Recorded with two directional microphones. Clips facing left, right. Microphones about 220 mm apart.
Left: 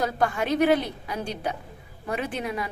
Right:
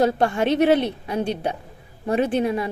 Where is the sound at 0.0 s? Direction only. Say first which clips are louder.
Right 6 dB; 25° right (ahead or behind).